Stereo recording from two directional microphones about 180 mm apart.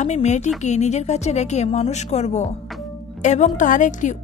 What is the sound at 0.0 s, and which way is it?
A woman's voice, 40° left (ahead or behind).